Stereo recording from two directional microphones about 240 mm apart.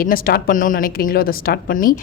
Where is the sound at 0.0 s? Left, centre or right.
Left.